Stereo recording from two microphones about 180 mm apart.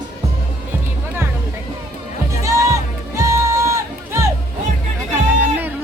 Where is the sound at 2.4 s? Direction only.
15° right (ahead or behind).